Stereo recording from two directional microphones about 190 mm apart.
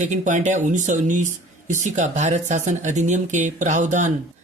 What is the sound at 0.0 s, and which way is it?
Speech, 40° right (ahead or behind).